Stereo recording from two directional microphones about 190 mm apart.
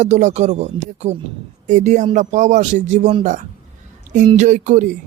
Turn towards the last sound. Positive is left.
turn(degrees=-40)  # may be behind; listen again after turning